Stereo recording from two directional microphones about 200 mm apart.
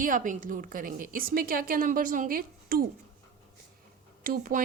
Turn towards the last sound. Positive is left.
turn(degrees=-40)  # may be behind; listen again after turning